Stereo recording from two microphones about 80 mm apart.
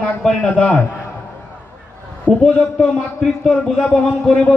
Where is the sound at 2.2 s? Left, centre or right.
Centre.